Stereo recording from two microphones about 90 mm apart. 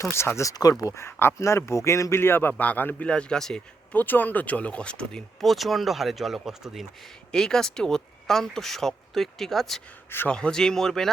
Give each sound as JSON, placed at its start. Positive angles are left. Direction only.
{"t": 0.0, "sound": "speech", "side_deg": 30}
{"t": 0.5, "sound": "speech", "side_deg": 45}
{"t": 1.0, "sound": "a man's voice", "side_deg": 25}
{"t": 3.9, "sound": "speech", "side_deg": 20}
{"t": 7.3, "sound": "speech", "side_deg": 5}